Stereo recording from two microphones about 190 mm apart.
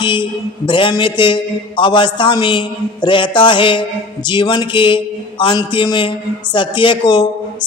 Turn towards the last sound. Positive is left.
turn(degrees=25)  # may be behind; listen again after turning